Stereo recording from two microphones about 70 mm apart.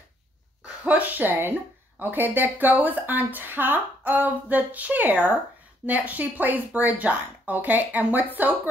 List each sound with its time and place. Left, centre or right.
0.8 s speech: right